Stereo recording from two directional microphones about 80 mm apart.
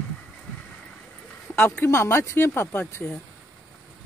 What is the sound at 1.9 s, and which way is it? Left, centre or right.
Speech, left.